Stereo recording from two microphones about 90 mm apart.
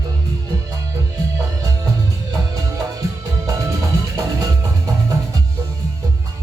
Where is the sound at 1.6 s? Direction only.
40° right (ahead or behind).